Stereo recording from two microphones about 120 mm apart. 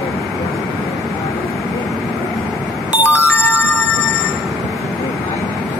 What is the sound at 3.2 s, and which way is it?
Music, 20° left (ahead or behind).